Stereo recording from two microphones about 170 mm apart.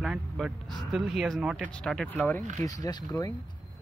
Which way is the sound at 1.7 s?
5° left (ahead or behind).